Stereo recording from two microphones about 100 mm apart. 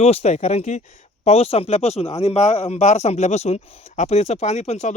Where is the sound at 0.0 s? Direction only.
90° left.